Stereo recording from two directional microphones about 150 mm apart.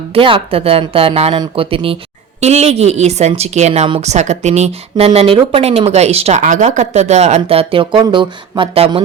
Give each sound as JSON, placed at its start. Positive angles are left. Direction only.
{"t": 0.1, "sound": "speech", "side_deg": -40}